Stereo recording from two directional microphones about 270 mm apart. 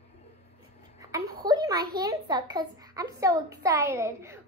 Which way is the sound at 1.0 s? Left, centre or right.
Centre.